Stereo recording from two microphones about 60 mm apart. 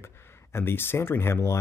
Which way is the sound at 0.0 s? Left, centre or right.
Left.